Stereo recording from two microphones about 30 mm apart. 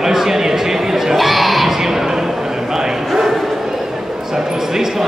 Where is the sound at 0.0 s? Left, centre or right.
Centre.